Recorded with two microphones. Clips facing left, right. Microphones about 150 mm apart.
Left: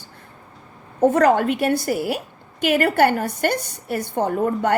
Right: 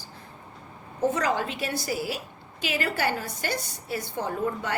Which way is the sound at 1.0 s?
55° left (ahead or behind).